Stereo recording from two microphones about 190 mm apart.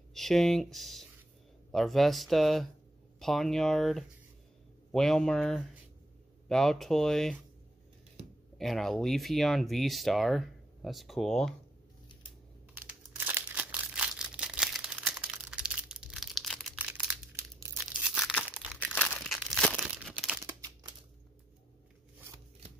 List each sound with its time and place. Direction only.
0.1 s speech: centre (ahead or behind)
8.5 s speech: centre (ahead or behind)
12.7 s crumpling: 10° right (ahead or behind)
17.6 s tearing: 5° right (ahead or behind)
18.9 s crumpling: 5° left (ahead or behind)
20.4 s crumpling: 15° right (ahead or behind)